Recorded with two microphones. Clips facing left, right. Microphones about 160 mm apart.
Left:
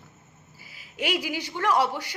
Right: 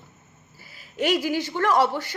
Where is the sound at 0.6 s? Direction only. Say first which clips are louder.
Right 6 dB; 10° left (ahead or behind).